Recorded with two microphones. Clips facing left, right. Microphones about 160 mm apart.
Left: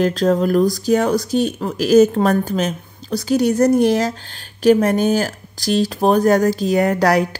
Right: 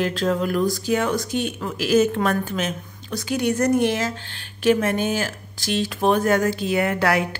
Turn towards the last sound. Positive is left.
turn(degrees=40)  # may be behind; listen again after turning